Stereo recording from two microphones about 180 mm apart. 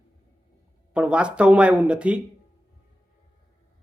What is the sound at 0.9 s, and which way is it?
Speech, 5° right (ahead or behind).